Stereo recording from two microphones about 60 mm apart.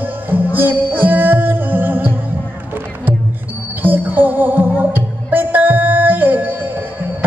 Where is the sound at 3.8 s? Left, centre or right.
Right.